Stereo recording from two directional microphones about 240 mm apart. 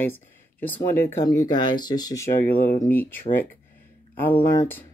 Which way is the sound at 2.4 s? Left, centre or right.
Left.